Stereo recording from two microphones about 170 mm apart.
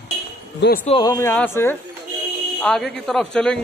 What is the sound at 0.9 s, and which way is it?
A man's voice, 20° left (ahead or behind).